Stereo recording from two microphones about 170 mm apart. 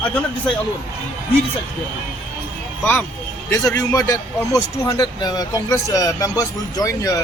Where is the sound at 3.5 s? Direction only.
10° left (ahead or behind).